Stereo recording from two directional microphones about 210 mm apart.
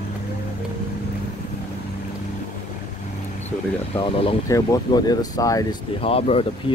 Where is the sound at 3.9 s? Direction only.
25° left (ahead or behind).